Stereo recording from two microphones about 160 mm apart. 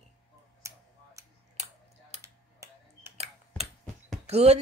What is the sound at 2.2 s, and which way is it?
Computer keyboard, 20° right (ahead or behind).